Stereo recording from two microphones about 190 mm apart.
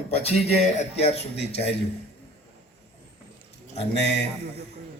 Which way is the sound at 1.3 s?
60° left (ahead or behind).